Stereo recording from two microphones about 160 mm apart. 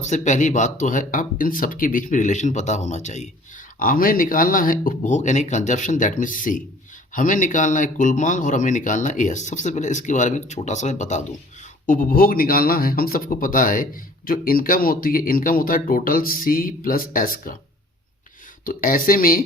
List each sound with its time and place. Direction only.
0.0 s speech: 50° left (ahead or behind)
3.8 s speech: 60° left (ahead or behind)
11.9 s speech: 60° left (ahead or behind)
18.6 s speech: 60° left (ahead or behind)